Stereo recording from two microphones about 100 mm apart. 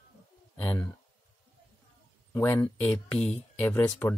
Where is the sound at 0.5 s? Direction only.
15° left (ahead or behind).